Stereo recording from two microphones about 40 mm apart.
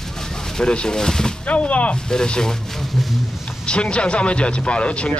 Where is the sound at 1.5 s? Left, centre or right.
Left.